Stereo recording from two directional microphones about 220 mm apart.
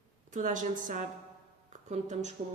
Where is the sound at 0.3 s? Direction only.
35° right (ahead or behind).